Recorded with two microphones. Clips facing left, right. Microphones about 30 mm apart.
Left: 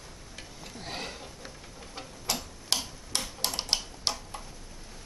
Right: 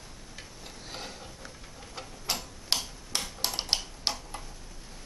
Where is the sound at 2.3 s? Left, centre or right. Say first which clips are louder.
Left 1 dB; centre.